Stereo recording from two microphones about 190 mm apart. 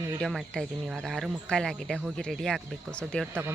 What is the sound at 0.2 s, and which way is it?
A woman's voice, centre (ahead or behind).